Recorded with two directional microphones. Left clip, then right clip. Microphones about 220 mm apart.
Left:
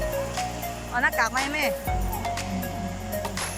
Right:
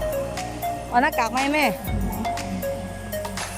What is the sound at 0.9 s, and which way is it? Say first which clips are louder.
Speech: right 3 dB; 20° right (ahead or behind).